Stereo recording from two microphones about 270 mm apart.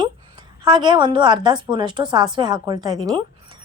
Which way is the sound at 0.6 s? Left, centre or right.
Centre.